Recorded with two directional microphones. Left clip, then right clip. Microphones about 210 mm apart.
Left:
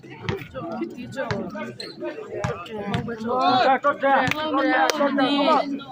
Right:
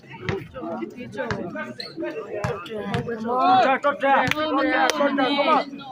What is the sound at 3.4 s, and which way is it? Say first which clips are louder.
Speech: right 2 dB; 55° left (ahead or behind).